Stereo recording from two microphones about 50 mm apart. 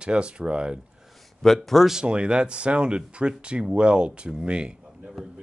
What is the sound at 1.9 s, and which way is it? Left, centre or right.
Speech, right.